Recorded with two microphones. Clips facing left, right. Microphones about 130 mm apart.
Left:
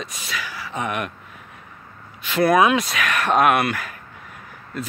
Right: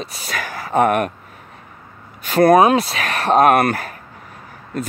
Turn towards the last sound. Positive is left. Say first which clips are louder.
# right 5 dB
turn(degrees=-45)  # may be behind; listen again after turning